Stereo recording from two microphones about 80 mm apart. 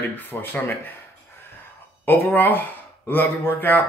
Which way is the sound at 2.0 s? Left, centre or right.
Left.